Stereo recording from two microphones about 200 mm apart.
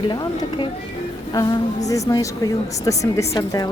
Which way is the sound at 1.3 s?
15° left (ahead or behind).